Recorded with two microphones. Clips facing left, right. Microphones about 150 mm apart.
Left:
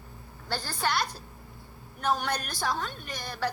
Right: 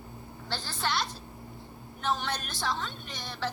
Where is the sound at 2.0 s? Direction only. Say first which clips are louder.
Left 3 dB; 45° left (ahead or behind).